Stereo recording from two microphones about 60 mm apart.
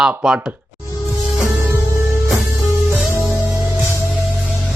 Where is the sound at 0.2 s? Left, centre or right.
Centre.